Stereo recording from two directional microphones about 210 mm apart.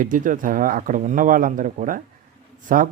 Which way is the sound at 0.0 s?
40° right (ahead or behind).